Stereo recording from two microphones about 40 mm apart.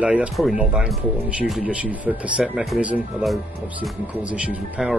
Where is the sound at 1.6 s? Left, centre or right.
Right.